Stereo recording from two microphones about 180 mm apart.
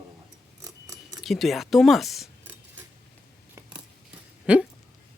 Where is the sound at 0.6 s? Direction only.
20° right (ahead or behind).